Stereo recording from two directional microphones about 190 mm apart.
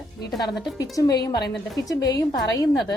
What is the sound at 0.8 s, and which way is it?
A woman's voice, 20° left (ahead or behind).